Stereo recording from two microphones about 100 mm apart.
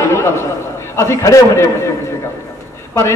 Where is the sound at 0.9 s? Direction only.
30° left (ahead or behind).